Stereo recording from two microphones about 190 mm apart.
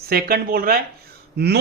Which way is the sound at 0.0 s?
55° right (ahead or behind).